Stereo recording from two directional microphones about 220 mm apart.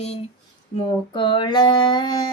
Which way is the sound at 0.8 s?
20° left (ahead or behind).